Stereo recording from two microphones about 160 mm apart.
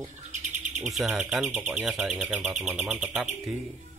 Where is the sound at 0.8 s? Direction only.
Centre (ahead or behind).